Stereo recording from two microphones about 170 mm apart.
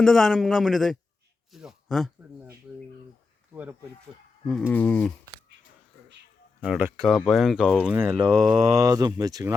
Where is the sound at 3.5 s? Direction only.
10° right (ahead or behind).